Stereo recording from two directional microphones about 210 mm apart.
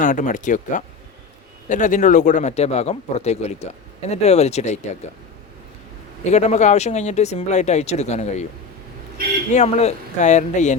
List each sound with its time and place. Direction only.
0.0 s speech: 35° left (ahead or behind)
6.2 s speech: 35° left (ahead or behind)
9.5 s speech: 30° left (ahead or behind)